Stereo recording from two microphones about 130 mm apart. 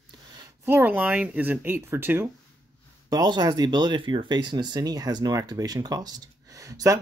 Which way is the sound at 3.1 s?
30° right (ahead or behind).